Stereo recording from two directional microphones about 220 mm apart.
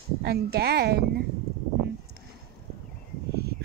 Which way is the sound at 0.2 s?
45° right (ahead or behind).